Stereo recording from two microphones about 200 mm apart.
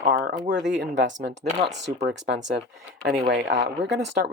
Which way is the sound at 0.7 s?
65° right (ahead or behind).